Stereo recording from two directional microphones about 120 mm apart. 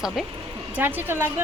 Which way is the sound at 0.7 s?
15° right (ahead or behind).